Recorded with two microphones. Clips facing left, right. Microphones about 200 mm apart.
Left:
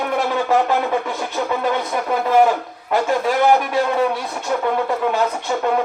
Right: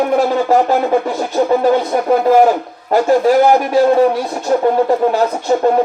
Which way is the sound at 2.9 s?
35° right (ahead or behind).